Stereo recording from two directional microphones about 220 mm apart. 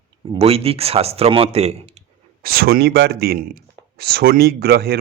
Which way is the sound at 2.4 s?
45° right (ahead or behind).